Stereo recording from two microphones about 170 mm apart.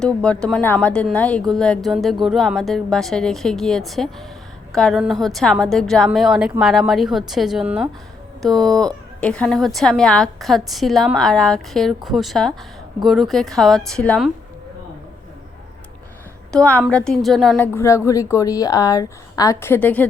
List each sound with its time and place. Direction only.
0.0 s a woman's voice: 5° left (ahead or behind)
16.5 s a woman's voice: 5° left (ahead or behind)
17.7 s a woman's voice: 15° left (ahead or behind)